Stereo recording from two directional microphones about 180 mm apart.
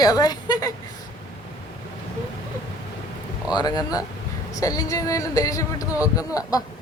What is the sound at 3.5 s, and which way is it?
Speech, 25° left (ahead or behind).